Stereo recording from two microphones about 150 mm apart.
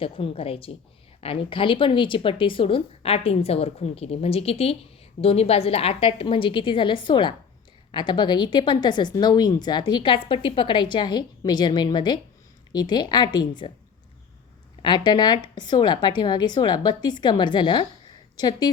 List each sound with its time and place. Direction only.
0.0 s a woman's voice: 40° left (ahead or behind)
14.8 s a woman's voice: 30° left (ahead or behind)